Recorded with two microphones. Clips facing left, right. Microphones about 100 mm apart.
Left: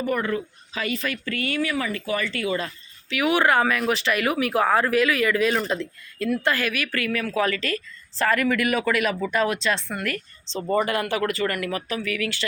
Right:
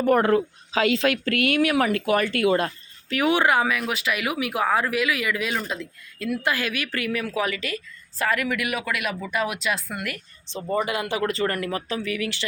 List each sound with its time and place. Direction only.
0.0 s a woman's voice: 65° right (ahead or behind); by 3.2 s 50° right (ahead or behind)
3.2 s speech: 25° right (ahead or behind)
3.4 s speech: 10° right (ahead or behind)